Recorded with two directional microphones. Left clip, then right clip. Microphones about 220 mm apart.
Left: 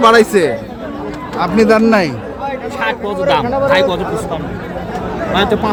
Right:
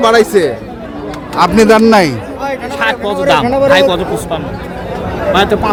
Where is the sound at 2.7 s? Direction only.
25° right (ahead or behind).